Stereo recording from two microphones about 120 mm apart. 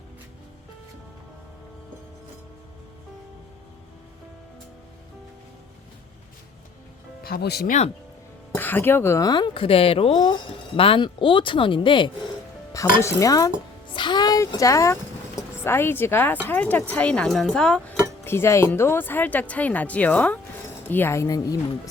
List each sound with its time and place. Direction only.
8.5 s speech: 15° left (ahead or behind)
9.3 s speech: 45° left (ahead or behind)
12.7 s speech: 25° left (ahead or behind)
13.9 s a sound: 40° left (ahead or behind)
15.4 s a woman's voice: 20° left (ahead or behind)
18.3 s speech: 20° left (ahead or behind)